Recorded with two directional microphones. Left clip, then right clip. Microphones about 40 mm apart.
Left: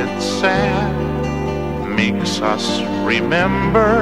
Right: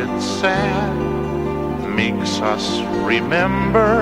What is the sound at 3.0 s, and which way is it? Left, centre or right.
Music, right.